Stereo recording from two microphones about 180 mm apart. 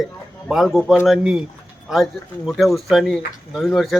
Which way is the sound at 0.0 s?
Centre (ahead or behind).